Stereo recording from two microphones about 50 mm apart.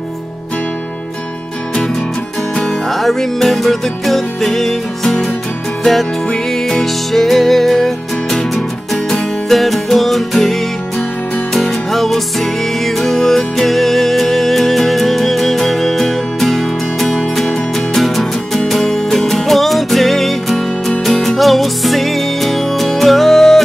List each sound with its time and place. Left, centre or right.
2.6 s music: centre